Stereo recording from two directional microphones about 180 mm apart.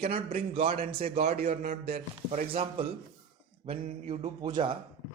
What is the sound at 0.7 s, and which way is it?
Speech, 50° right (ahead or behind).